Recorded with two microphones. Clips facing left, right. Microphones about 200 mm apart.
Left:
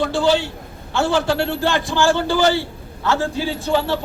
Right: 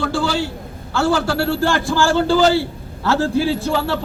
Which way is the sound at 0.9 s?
20° left (ahead or behind).